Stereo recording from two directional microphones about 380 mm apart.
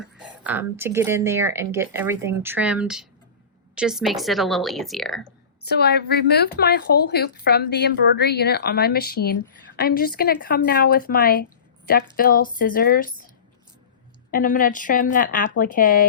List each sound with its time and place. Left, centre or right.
0.0 s a woman's voice: centre
5.6 s a woman's voice: left
14.3 s a woman's voice: left